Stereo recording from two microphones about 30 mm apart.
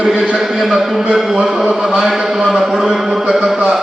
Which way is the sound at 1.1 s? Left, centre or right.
Centre.